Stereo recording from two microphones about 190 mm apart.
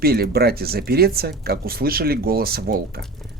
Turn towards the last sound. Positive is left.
turn(degrees=-55)  # may be behind; listen again after turning